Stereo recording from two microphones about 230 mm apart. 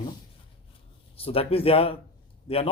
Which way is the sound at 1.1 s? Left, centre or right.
Left.